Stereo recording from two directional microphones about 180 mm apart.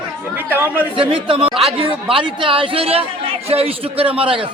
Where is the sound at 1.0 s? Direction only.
30° right (ahead or behind).